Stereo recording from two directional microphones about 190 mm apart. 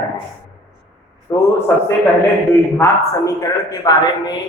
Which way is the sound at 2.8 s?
20° left (ahead or behind).